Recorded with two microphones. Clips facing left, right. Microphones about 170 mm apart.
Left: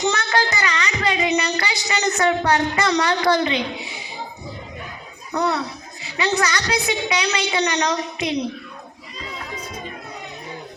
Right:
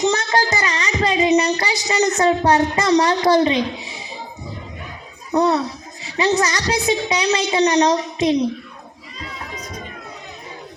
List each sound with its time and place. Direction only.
0.3 s music: 30° right (ahead or behind)
3.2 s a child's voice: 30° right (ahead or behind)
5.3 s a child's voice: 35° right (ahead or behind)